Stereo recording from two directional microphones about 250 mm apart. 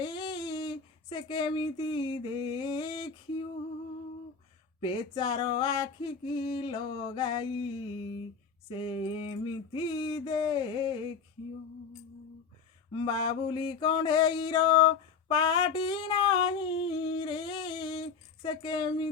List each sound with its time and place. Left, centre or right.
0.0 s speech: centre
4.8 s mantra: centre
13.0 s mantra: centre